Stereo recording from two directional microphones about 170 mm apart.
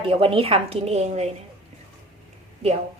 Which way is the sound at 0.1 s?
35° right (ahead or behind).